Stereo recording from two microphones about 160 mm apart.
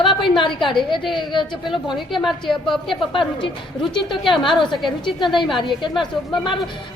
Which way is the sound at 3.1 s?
30° left (ahead or behind).